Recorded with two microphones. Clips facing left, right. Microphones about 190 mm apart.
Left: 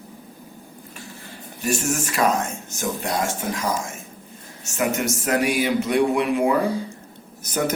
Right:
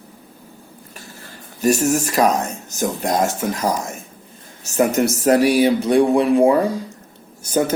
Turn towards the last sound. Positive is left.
turn(degrees=-30)  # may be behind; listen again after turning